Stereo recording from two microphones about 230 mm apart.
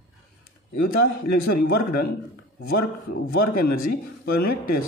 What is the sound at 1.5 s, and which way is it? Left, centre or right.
Speech, left.